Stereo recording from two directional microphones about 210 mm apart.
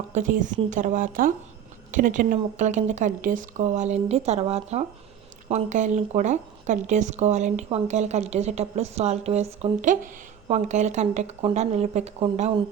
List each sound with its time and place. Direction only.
0.1 s speech: 35° right (ahead or behind)